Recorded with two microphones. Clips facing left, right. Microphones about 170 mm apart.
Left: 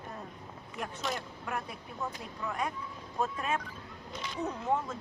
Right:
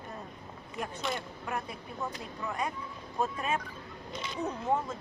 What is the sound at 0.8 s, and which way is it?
Speech, centre (ahead or behind).